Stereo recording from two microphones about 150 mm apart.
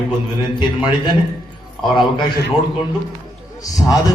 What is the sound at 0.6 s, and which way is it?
Speech, 30° left (ahead or behind).